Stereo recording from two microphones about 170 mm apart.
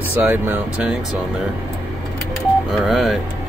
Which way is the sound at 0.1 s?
10° right (ahead or behind).